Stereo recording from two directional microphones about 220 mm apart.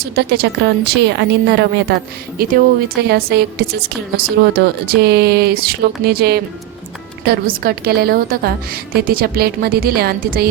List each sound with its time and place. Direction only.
0.0 s a woman's voice: 45° right (ahead or behind)